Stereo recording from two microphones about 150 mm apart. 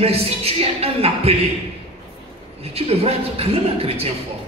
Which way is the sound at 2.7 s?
40° right (ahead or behind).